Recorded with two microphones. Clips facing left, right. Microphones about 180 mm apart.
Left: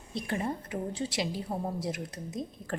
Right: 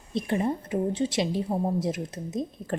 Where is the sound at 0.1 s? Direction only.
20° right (ahead or behind).